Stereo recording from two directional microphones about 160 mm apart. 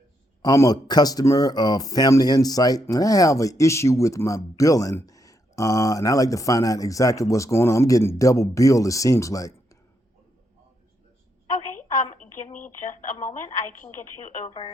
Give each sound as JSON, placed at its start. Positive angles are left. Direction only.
{"t": 0.4, "sound": "speech", "side_deg": 20}
{"t": 11.5, "sound": "a sound", "side_deg": 55}
{"t": 12.1, "sound": "speech", "side_deg": 50}